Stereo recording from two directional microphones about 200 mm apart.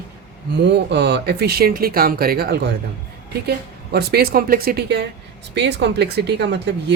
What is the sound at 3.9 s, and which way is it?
Speech, 50° right (ahead or behind).